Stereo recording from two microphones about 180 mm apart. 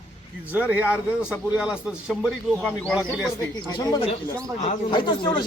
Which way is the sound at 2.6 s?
5° left (ahead or behind).